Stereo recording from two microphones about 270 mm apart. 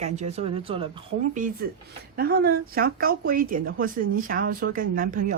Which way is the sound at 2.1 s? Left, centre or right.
Right.